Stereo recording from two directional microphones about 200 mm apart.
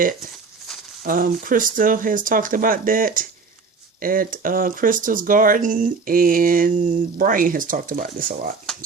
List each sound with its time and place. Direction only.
1.0 s speech: 45° right (ahead or behind)